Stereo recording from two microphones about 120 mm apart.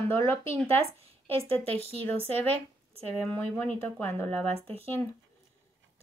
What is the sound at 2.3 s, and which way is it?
Speech, 15° left (ahead or behind).